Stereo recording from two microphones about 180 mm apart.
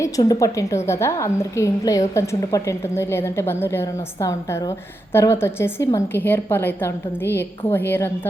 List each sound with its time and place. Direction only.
0.0 s a woman's voice: 20° left (ahead or behind)